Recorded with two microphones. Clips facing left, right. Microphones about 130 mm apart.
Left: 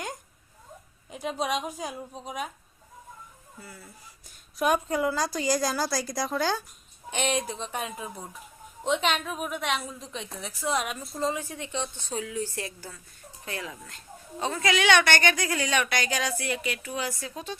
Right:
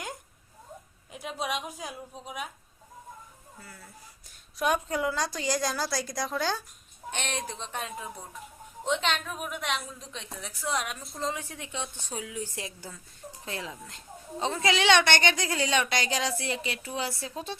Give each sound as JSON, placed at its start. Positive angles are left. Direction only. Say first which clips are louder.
{"t": 1.4, "sound": "a woman's voice", "louder": "left 3 dB", "side_deg": -5}
{"t": 4.5, "sound": "a woman's voice", "louder": "left 3 dB", "side_deg": 5}